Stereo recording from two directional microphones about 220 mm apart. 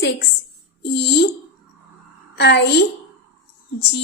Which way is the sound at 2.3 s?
50° left (ahead or behind).